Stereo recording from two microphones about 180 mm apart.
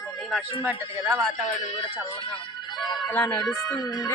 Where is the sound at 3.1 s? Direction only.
10° left (ahead or behind).